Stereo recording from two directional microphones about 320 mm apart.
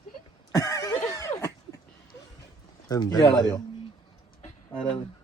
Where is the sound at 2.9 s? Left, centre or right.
Centre.